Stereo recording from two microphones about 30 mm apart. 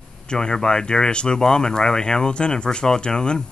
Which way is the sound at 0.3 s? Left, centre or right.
Left.